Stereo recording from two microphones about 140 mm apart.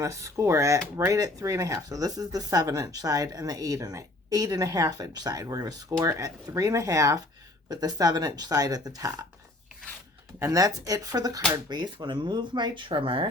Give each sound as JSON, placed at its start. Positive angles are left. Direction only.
{"t": 0.0, "sound": "speech", "side_deg": -20}
{"t": 10.4, "sound": "speech", "side_deg": -25}